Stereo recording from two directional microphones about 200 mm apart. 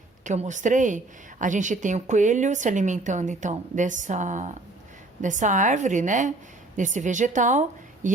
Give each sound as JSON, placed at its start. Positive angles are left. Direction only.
{"t": 0.3, "sound": "a woman's voice", "side_deg": -35}